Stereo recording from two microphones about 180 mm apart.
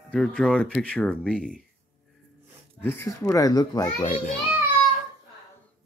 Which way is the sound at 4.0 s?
35° left (ahead or behind).